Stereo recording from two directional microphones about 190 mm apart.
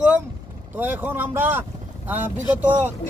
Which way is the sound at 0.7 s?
10° right (ahead or behind).